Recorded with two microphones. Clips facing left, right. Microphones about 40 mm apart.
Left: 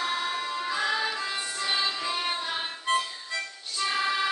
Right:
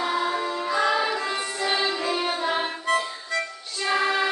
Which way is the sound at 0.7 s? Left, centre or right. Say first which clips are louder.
Right 6 dB; centre.